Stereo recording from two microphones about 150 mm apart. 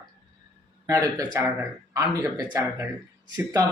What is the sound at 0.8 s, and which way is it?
Speech, 25° right (ahead or behind).